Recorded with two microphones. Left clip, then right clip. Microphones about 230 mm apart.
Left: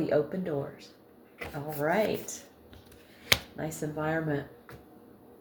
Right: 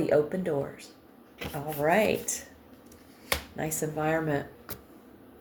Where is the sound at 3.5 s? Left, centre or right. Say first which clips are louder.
Right 3 dB; right.